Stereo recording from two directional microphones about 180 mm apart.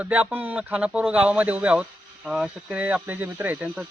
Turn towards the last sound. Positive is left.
turn(degrees=-10)  # may be behind; listen again after turning